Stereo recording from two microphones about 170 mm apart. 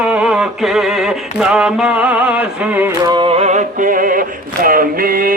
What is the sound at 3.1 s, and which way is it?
Music, 30° right (ahead or behind).